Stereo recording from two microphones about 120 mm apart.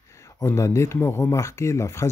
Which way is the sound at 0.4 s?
25° left (ahead or behind).